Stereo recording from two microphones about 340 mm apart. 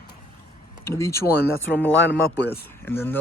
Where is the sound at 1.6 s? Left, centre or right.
Centre.